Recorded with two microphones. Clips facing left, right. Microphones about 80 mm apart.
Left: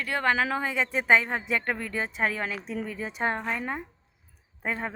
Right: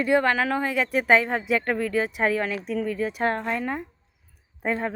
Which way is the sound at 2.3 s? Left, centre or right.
Centre.